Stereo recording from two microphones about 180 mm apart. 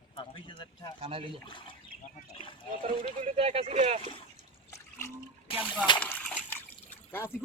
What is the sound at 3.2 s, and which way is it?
Speech, 35° right (ahead or behind).